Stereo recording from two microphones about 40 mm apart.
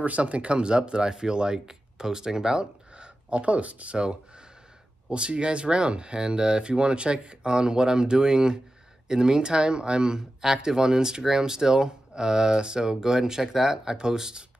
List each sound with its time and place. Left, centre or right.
0.0 s speech: right; by 14.4 s centre